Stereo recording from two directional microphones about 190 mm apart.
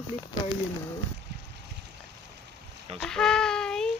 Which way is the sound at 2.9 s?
5° left (ahead or behind).